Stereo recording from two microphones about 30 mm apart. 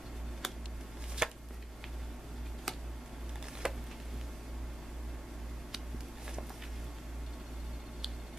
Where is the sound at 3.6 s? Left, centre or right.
Right.